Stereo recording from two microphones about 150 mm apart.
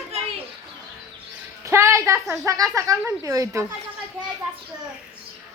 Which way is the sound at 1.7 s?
20° right (ahead or behind).